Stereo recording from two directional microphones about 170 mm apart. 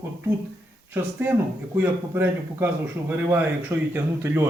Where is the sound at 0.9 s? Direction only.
10° right (ahead or behind).